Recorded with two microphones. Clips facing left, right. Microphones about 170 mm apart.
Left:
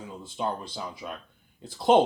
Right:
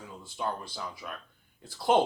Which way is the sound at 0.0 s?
20° left (ahead or behind).